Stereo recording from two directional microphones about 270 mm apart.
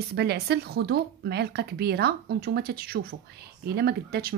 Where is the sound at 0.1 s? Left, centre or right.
Right.